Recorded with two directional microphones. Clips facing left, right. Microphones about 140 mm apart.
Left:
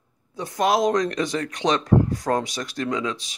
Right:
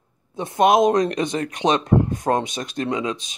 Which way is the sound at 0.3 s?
20° right (ahead or behind).